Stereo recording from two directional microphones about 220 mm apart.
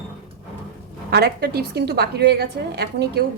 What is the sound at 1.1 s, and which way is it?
A woman's voice, 50° right (ahead or behind).